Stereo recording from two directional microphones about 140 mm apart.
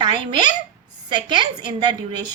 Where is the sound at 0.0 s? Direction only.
30° right (ahead or behind).